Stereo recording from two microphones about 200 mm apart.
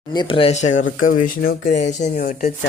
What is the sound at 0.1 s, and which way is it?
Speech, 25° left (ahead or behind).